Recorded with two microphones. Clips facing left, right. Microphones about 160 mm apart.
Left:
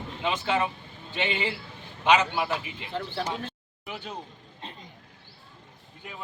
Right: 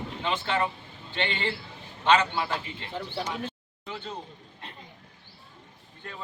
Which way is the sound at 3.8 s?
15° left (ahead or behind).